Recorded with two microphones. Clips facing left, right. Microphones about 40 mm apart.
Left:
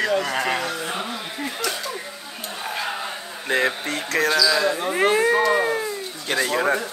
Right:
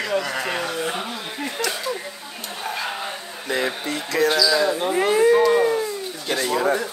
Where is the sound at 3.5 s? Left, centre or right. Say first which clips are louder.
Left 2 dB; left.